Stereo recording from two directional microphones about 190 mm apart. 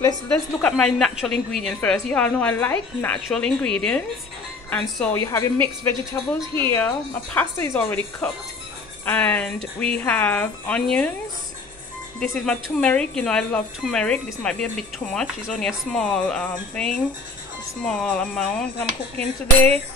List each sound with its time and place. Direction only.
0.0 s speech: 15° left (ahead or behind)
7.3 s speech: 15° left (ahead or behind)
12.2 s speech: 5° left (ahead or behind)